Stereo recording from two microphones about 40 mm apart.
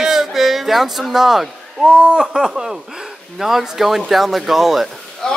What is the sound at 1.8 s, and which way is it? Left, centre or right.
Speech, right.